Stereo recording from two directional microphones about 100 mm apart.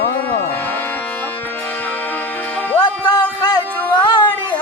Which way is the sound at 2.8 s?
50° left (ahead or behind).